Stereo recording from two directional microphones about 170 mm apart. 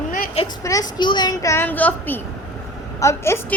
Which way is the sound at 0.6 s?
20° left (ahead or behind).